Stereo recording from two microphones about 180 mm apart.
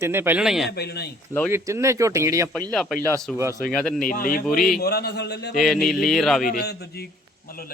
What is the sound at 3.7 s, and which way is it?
Speech, 5° left (ahead or behind).